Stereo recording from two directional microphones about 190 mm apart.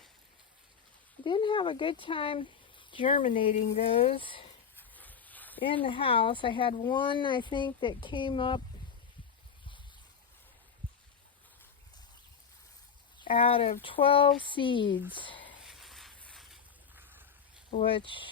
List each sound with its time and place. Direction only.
1.2 s speech: 25° left (ahead or behind)
4.8 s dog: 10° left (ahead or behind)
5.6 s speech: 25° left (ahead or behind)
13.1 s speech: 25° left (ahead or behind)
15.6 s a sound: centre (ahead or behind)
17.7 s speech: 25° left (ahead or behind)